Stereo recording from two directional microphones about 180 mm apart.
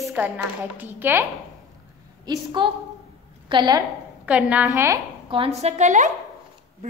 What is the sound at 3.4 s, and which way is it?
Speech, 25° right (ahead or behind).